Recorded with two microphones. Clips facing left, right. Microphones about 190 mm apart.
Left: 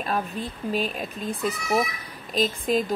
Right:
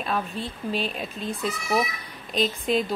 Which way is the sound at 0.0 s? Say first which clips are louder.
Left 1 dB; 45° left (ahead or behind).